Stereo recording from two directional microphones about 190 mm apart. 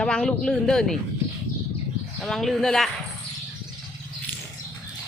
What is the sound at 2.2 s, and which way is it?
Speech, centre (ahead or behind).